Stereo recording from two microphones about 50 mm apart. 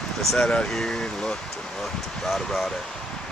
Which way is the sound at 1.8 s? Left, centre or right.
Centre.